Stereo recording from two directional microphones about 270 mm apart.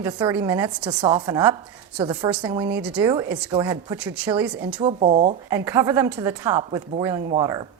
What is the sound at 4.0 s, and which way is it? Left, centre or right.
Speech, centre.